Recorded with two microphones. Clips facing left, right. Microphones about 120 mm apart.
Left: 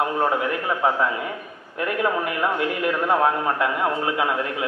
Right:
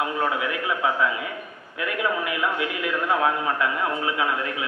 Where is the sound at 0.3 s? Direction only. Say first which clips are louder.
Left 3 dB; 45° left (ahead or behind).